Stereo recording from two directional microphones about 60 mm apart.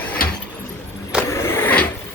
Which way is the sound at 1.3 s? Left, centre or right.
Left.